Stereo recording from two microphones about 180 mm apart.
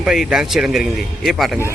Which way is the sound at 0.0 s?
5° right (ahead or behind).